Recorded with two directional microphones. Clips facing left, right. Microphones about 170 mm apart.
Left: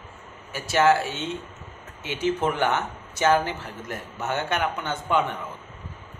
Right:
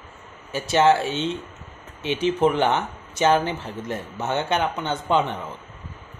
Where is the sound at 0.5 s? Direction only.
25° right (ahead or behind).